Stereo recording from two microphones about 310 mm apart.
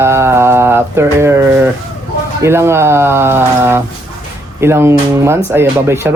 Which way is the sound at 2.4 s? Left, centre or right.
Centre.